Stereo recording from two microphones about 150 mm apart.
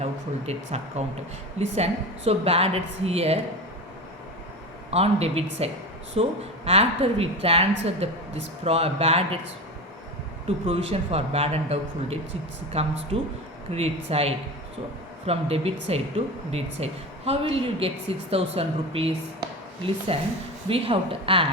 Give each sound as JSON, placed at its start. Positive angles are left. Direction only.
{"t": 0.0, "sound": "a woman's voice", "side_deg": -45}
{"t": 4.9, "sound": "a woman's voice", "side_deg": -45}
{"t": 10.7, "sound": "a woman's voice", "side_deg": -40}